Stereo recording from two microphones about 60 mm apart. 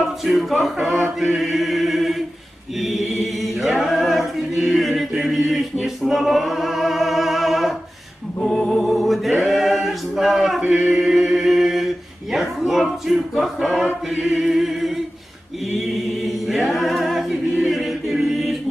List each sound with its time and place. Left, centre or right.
0.0 s music: centre
2.7 s chant: centre
5.8 s opera: centre
8.4 s music: centre
9.4 s male singing: centre
10.6 s chant: right
10.9 s music: centre
12.3 s speech: centre
14.1 s music: centre
16.2 s a capella: centre